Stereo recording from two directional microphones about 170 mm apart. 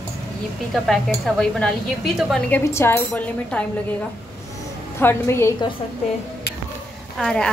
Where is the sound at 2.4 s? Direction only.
15° left (ahead or behind).